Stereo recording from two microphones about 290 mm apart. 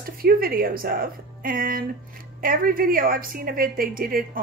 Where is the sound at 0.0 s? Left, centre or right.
Right.